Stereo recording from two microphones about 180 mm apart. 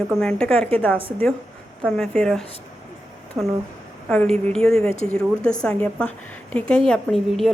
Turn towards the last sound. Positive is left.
turn(degrees=0)  # may be behind; listen again after turning